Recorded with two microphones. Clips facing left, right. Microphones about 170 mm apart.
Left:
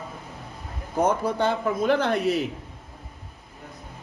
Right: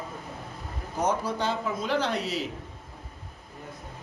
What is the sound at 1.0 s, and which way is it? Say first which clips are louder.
A man's voice: left 5 dB; 55° left (ahead or behind).